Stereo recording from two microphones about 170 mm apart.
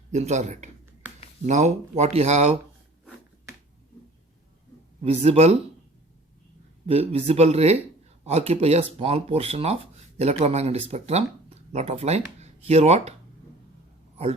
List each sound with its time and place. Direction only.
0.1 s speech: 40° right (ahead or behind)
5.0 s speech: 35° right (ahead or behind)
6.8 s speech: 35° right (ahead or behind)